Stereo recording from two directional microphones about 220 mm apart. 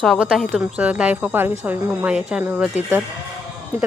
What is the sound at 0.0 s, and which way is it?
Speech, centre (ahead or behind).